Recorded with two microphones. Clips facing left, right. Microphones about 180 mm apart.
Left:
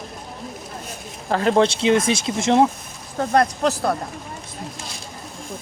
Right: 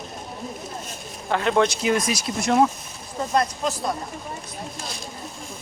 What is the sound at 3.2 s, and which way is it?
Speech, 65° left (ahead or behind).